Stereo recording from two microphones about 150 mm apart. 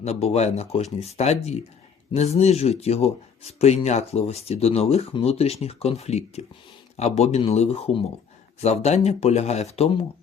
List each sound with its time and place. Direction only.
0.0 s speech: 45° left (ahead or behind)